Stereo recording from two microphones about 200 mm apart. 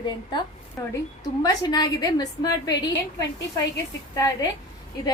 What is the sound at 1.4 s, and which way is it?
A woman's voice, 20° left (ahead or behind).